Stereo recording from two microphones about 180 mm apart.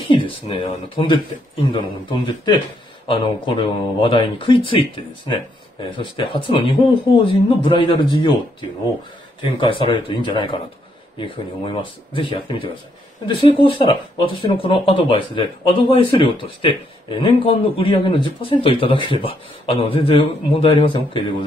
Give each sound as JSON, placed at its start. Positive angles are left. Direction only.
{"t": 0.1, "sound": "speech", "side_deg": 30}